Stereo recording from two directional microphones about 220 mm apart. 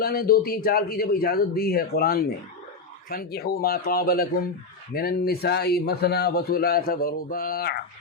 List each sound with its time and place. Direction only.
0.0 s a man's voice: 45° left (ahead or behind)